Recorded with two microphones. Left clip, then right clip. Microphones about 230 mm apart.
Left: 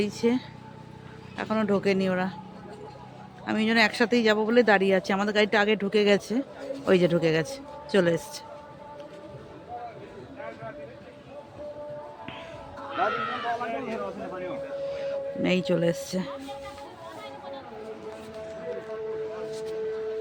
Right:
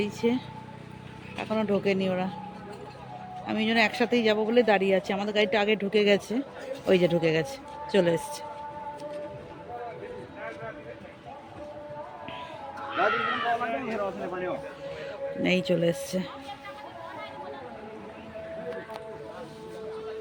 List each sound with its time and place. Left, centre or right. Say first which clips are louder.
0.0 s speech: left 2 dB; centre
3.4 s speech: left 2 dB; centre
12.9 s sheep: right 2 dB; right
15.4 s speech: right 1 dB; centre